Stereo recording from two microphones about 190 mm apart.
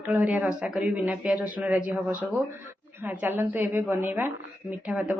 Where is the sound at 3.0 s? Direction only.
10° right (ahead or behind).